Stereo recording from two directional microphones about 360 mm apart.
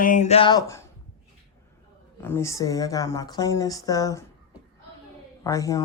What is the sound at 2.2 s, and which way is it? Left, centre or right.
Speech, centre.